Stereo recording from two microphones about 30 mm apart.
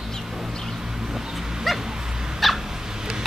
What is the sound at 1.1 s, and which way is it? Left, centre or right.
Dog, centre.